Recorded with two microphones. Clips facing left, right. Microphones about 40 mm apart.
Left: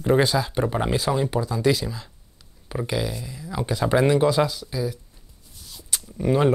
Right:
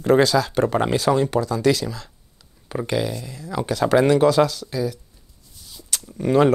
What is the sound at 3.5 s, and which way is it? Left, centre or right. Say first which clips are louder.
Speech: right 3 dB; right.